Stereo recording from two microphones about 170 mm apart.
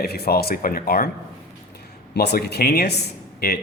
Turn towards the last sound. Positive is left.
turn(degrees=70)  # may be behind; listen again after turning